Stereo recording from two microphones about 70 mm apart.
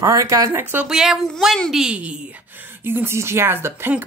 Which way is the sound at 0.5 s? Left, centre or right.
Right.